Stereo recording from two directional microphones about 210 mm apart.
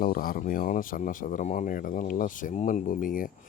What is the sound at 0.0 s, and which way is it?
Speech, 40° left (ahead or behind).